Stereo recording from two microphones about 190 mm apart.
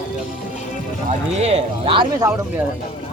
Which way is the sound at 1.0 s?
35° right (ahead or behind).